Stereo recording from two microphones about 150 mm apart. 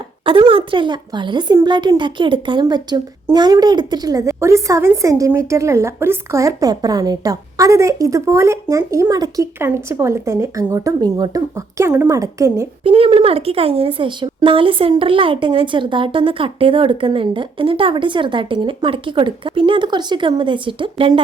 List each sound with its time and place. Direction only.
0.3 s a woman's voice: 35° right (ahead or behind)
12.8 s a woman's voice: 40° right (ahead or behind)